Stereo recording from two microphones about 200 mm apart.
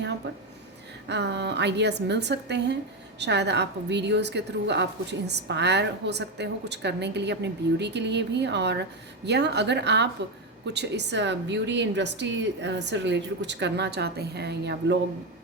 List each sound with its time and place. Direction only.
1.0 s a woman's voice: 60° right (ahead or behind)